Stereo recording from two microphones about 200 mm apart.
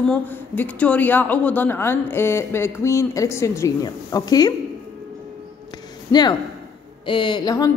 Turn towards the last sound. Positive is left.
turn(degrees=20)  # may be behind; listen again after turning